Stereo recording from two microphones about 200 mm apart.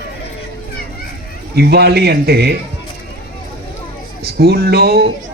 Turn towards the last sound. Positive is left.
turn(degrees=-50)  # may be behind; listen again after turning